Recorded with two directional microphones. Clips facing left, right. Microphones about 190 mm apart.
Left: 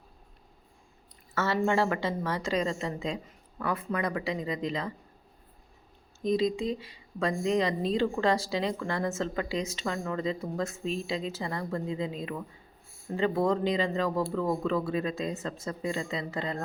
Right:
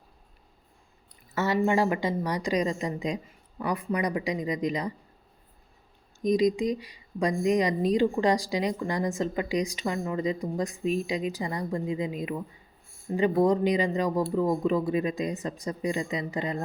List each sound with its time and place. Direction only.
1.6 s speech: 15° right (ahead or behind)
6.2 s speech: 15° right (ahead or behind)